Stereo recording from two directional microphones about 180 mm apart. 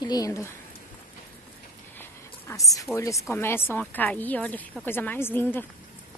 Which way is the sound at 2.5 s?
15° left (ahead or behind).